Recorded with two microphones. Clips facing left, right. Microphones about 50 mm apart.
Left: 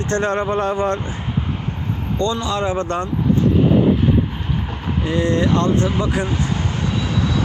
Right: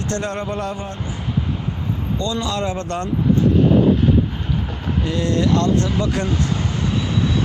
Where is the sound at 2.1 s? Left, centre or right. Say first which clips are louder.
Left 3 dB; left.